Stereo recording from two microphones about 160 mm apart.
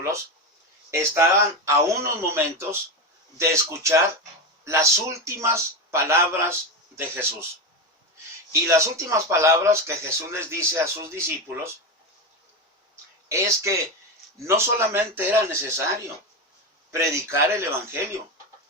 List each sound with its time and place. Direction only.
0.9 s speech: 15° right (ahead or behind)
8.6 s speech: 20° right (ahead or behind)
13.2 s speech: 20° right (ahead or behind)
16.9 s speech: 15° right (ahead or behind)